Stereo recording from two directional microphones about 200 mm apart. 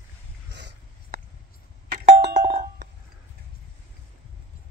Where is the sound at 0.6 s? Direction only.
60° right (ahead or behind).